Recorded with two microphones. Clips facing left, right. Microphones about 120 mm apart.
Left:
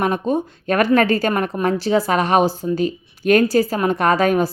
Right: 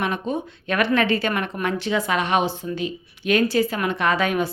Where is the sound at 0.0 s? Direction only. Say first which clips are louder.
Left 6 dB; 40° left (ahead or behind).